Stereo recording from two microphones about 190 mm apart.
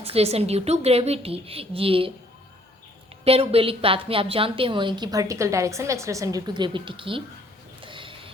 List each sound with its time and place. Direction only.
0.0 s a woman's voice: 30° right (ahead or behind)
3.2 s a woman's voice: 30° right (ahead or behind)
7.8 s a sound: 25° right (ahead or behind)